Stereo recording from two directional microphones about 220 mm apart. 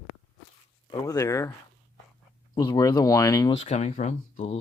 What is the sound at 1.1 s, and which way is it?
Speech, 15° left (ahead or behind).